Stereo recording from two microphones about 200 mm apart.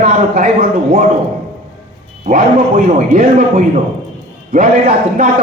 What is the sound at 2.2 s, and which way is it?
A man's voice, 45° right (ahead or behind).